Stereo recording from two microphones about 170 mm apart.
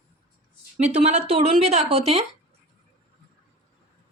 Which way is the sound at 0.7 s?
40° right (ahead or behind).